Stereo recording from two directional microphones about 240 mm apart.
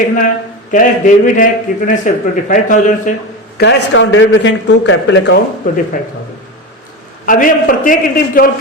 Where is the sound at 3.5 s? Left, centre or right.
Left.